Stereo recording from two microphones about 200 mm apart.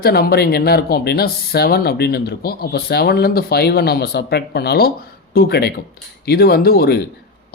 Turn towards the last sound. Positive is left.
turn(degrees=50)  # may be behind; listen again after turning